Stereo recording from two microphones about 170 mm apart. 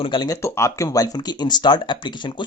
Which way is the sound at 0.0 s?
25° left (ahead or behind).